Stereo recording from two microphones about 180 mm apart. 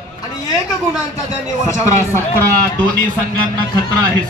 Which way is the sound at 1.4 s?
15° left (ahead or behind).